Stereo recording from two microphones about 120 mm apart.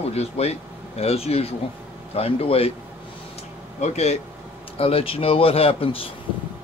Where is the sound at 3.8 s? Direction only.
65° left (ahead or behind).